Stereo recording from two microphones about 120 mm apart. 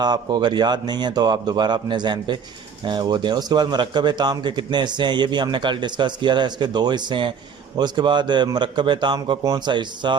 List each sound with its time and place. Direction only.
0.0 s a man's voice: 35° right (ahead or behind)